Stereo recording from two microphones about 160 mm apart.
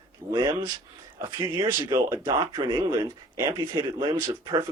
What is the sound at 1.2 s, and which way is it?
Speech, 15° right (ahead or behind).